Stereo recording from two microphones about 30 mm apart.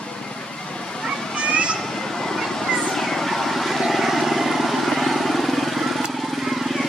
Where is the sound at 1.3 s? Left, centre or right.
Right.